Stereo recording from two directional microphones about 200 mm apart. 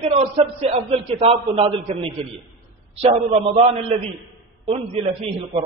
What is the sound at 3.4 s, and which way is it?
Speech, 30° right (ahead or behind).